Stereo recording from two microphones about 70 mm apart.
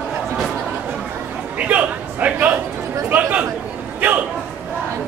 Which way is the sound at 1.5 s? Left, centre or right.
Right.